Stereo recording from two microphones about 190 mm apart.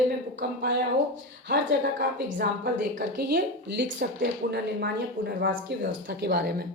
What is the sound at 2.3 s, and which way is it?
A woman's voice, 55° right (ahead or behind).